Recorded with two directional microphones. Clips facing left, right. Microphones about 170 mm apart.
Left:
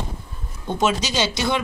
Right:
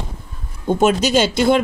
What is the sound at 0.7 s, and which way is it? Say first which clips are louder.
Speech: right 7 dB; 50° right (ahead or behind).